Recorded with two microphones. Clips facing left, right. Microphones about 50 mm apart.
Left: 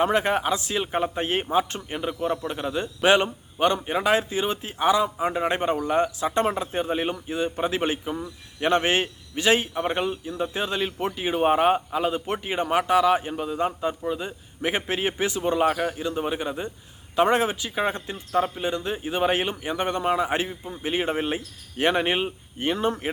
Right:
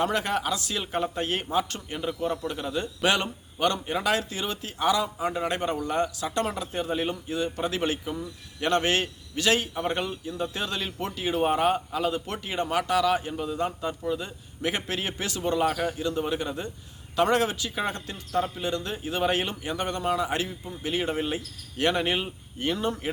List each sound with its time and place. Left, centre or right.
0.0 s speech: left